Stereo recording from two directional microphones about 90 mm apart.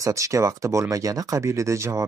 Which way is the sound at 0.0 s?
35° right (ahead or behind).